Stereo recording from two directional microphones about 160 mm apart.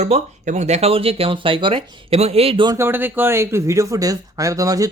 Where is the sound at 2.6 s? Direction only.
15° right (ahead or behind).